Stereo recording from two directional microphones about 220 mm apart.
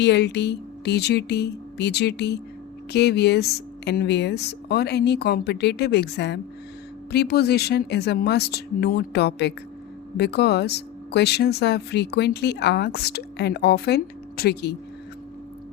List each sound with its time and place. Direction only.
0.0 s speech: 50° left (ahead or behind)